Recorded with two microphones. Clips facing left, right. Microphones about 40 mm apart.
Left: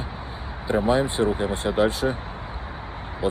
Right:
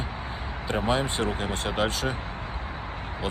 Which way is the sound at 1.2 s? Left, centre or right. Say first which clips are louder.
Left 5 dB; right.